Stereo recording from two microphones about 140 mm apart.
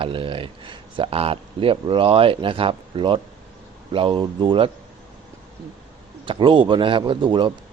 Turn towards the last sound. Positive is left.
turn(degrees=-35)  # may be behind; listen again after turning